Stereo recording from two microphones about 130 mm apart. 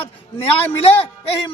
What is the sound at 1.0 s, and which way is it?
Speech, 50° left (ahead or behind).